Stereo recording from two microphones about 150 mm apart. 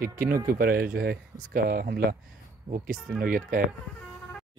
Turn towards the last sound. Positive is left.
turn(degrees=-65)  # may be behind; listen again after turning